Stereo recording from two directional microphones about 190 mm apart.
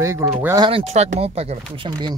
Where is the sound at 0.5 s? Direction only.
25° right (ahead or behind).